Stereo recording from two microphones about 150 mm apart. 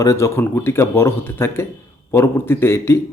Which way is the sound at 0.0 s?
20° left (ahead or behind).